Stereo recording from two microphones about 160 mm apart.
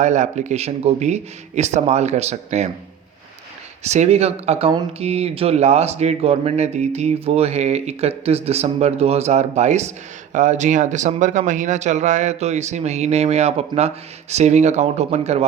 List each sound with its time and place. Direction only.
0.0 s speech: 50° right (ahead or behind)
3.8 s speech: 45° right (ahead or behind)